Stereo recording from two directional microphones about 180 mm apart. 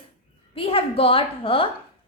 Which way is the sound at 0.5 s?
30° left (ahead or behind).